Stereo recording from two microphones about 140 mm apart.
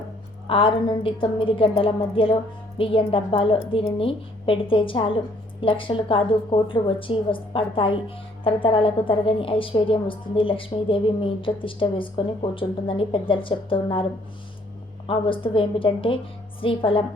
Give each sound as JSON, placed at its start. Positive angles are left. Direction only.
{"t": 0.4, "sound": "speech", "side_deg": 40}